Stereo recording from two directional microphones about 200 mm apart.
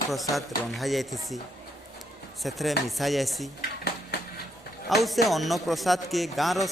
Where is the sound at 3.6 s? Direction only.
50° left (ahead or behind).